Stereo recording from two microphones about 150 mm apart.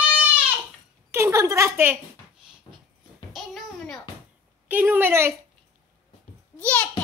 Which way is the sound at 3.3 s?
Centre (ahead or behind).